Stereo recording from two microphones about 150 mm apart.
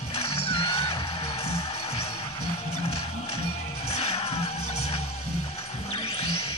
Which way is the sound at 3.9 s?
45° left (ahead or behind).